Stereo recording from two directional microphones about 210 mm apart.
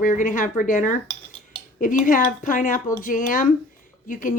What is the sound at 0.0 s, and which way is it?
Speech, 40° left (ahead or behind).